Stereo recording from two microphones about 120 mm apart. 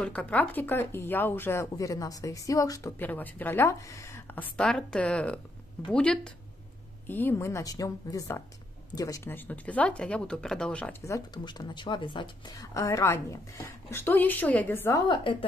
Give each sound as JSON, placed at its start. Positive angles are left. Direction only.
{"t": 0.0, "sound": "speech", "side_deg": 10}
{"t": 3.0, "sound": "speech", "side_deg": 15}
{"t": 11.1, "sound": "speech", "side_deg": 35}
{"t": 12.5, "sound": "speech", "side_deg": 25}
{"t": 15.0, "sound": "speech", "side_deg": 40}